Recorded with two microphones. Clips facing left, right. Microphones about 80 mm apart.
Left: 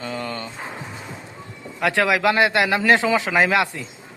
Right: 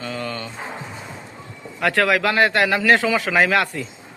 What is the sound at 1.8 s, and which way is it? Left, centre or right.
A man's voice, centre.